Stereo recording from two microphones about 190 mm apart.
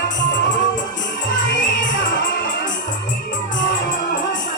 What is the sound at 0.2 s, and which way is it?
Music, 70° left (ahead or behind).